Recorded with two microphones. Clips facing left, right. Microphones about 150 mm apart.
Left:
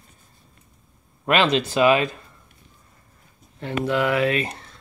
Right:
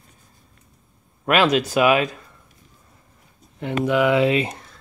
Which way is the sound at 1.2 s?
5° right (ahead or behind).